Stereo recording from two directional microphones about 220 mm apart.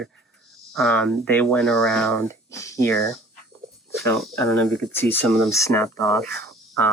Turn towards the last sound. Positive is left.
turn(degrees=5)  # may be behind; listen again after turning